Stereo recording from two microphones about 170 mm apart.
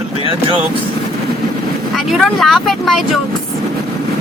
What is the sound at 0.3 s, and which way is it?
Speech, 30° right (ahead or behind).